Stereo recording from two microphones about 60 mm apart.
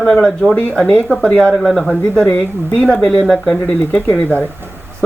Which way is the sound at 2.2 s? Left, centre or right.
Centre.